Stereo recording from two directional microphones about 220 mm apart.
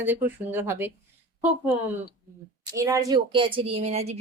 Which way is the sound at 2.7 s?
15° right (ahead or behind).